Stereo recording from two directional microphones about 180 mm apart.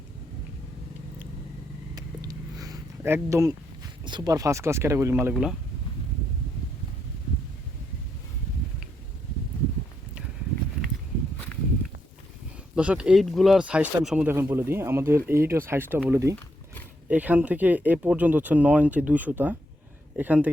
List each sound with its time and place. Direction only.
2.0 s a sound: 20° right (ahead or behind)
4.0 s speech: 25° right (ahead or behind)
5.3 s speech: centre (ahead or behind)
12.7 s speech: 5° right (ahead or behind)